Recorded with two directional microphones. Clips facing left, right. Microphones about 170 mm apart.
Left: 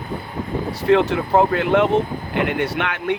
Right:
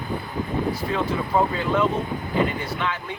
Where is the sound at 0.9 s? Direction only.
80° left.